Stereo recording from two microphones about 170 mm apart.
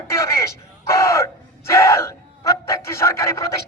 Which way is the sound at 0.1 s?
15° left (ahead or behind).